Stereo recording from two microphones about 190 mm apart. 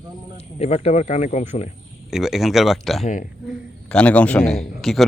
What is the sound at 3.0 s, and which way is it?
Speech, 45° left (ahead or behind).